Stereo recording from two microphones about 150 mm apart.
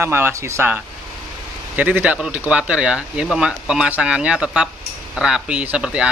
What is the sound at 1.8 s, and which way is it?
Speech, 10° right (ahead or behind).